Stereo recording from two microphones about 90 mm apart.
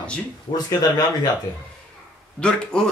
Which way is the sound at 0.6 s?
45° left (ahead or behind).